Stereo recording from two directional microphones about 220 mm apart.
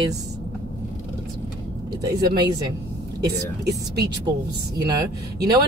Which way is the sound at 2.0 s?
15° right (ahead or behind).